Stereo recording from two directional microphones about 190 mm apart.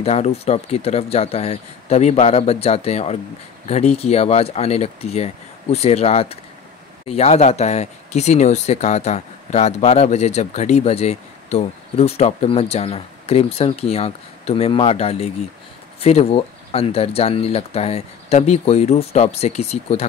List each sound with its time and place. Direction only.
0.0 s speech: 35° left (ahead or behind)